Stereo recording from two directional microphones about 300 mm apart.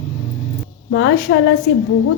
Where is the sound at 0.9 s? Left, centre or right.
Left.